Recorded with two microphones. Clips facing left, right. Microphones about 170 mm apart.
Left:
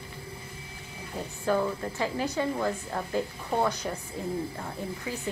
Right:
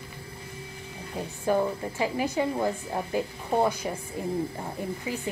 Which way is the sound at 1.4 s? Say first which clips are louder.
Right 2 dB; 15° right (ahead or behind).